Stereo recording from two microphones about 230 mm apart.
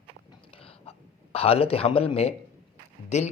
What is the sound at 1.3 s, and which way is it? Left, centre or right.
Speech, left.